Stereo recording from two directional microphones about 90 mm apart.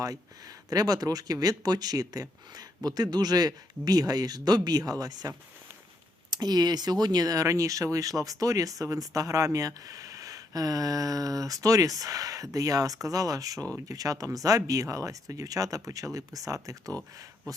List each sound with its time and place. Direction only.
0.0 s speech: 40° right (ahead or behind)
6.3 s speech: 50° right (ahead or behind)